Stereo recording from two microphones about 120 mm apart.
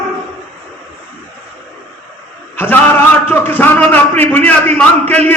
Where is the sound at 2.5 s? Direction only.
15° left (ahead or behind).